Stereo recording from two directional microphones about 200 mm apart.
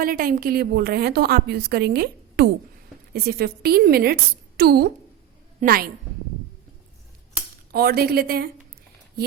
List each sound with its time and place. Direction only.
0.0 s a woman's voice: 45° right (ahead or behind)
7.7 s a woman's voice: 50° right (ahead or behind)